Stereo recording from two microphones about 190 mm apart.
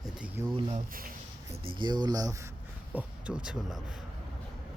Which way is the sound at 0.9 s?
50° right (ahead or behind).